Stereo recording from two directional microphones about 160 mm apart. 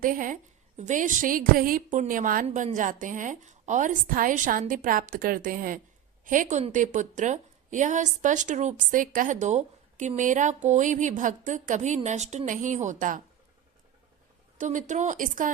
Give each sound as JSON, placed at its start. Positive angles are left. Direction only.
{"t": 0.0, "sound": "a woman's voice", "side_deg": -60}
{"t": 14.6, "sound": "a woman's voice", "side_deg": -50}